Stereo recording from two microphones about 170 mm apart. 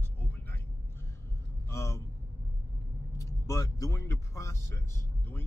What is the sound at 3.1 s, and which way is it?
Vehicle, 20° left (ahead or behind).